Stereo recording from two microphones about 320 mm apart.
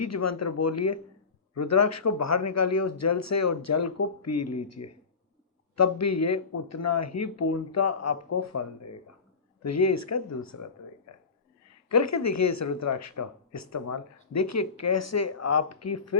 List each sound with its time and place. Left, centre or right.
0.0 s speech: left
11.1 s a sound: left
11.9 s speech: left